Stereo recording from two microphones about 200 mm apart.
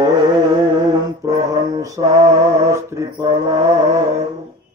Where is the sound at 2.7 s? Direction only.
15° right (ahead or behind).